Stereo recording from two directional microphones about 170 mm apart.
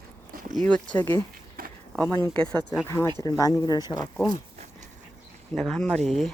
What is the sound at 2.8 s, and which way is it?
Speech, 15° left (ahead or behind).